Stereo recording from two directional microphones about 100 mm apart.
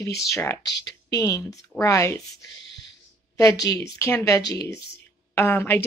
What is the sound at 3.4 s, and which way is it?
A woman's voice, 35° left (ahead or behind).